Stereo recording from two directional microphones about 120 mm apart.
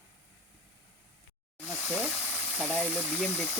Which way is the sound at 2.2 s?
15° left (ahead or behind).